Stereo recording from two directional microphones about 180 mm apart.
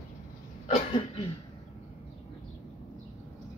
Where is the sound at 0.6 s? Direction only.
30° left (ahead or behind).